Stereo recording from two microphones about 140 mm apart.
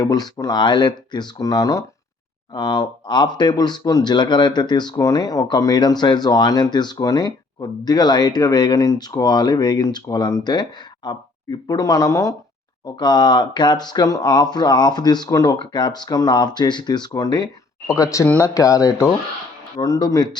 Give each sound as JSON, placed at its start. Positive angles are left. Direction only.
{"t": 0.0, "sound": "speech", "side_deg": 30}